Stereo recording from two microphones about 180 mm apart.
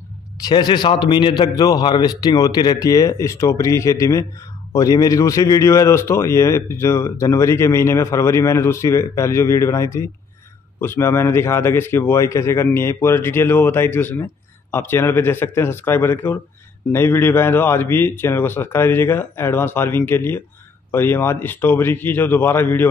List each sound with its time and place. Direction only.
0.4 s a man's voice: 25° left (ahead or behind)